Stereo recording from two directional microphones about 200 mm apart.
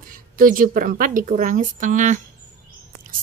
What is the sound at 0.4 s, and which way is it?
A woman's voice, 45° right (ahead or behind).